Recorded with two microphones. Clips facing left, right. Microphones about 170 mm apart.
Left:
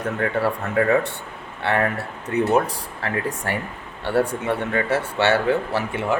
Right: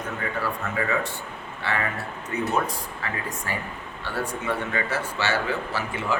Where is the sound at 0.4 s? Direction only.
60° left (ahead or behind).